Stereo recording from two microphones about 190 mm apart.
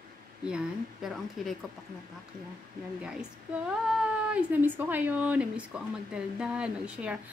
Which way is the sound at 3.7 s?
5° right (ahead or behind).